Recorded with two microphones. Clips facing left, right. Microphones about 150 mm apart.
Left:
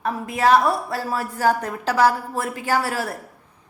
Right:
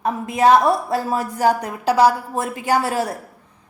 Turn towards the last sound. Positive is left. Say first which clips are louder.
# right 3 dB
turn(degrees=-20)  # may be behind; listen again after turning